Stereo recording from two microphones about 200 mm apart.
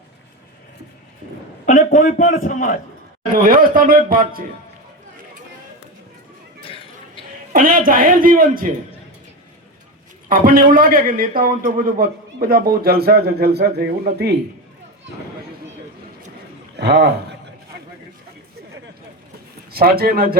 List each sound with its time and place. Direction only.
1.6 s a man's voice: 40° left (ahead or behind)
3.4 s a man's voice: 45° right (ahead or behind)
6.6 s a sound: 25° left (ahead or behind)
7.5 s a man's voice: 45° right (ahead or behind)
10.2 s a man's voice: 45° right (ahead or behind)
16.7 s a sound: 60° right (ahead or behind)
19.7 s a man's voice: 50° right (ahead or behind)